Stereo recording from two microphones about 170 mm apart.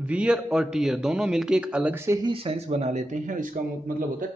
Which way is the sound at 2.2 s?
30° right (ahead or behind).